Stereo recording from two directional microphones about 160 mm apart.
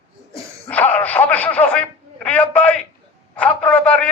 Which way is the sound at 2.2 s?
10° left (ahead or behind).